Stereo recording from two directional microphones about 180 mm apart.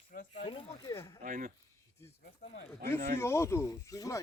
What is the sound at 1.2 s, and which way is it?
Speech, 50° right (ahead or behind).